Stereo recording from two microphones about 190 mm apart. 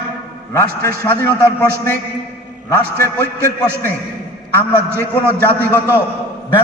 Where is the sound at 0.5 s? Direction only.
10° left (ahead or behind).